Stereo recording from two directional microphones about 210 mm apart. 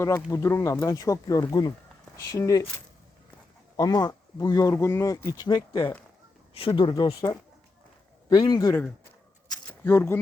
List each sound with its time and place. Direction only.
0.3 s speech: 15° left (ahead or behind)
3.8 s speech: 20° left (ahead or behind)
9.5 s a sound: 10° left (ahead or behind)